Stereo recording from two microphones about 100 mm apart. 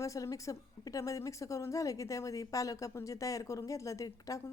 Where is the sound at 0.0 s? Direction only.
35° left (ahead or behind).